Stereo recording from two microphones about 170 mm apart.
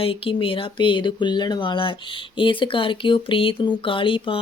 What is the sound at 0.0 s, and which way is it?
Speech, 30° left (ahead or behind).